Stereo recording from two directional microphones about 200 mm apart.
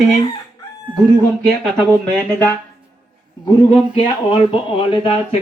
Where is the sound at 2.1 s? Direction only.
5° left (ahead or behind).